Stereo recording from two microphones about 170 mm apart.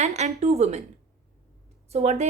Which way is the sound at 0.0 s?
40° right (ahead or behind).